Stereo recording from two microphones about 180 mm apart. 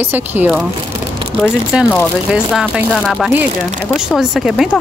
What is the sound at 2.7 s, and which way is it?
Speech, centre (ahead or behind).